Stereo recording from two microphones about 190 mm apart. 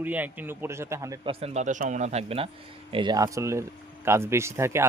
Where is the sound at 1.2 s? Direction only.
35° right (ahead or behind).